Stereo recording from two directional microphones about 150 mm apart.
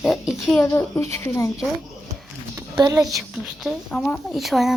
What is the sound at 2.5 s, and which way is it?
Speech, 25° right (ahead or behind).